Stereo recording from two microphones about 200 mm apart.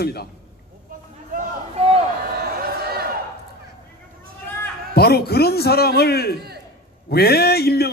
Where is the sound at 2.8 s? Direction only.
50° right (ahead or behind).